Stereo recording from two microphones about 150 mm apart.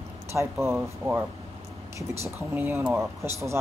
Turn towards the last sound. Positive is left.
turn(degrees=-15)  # may be behind; listen again after turning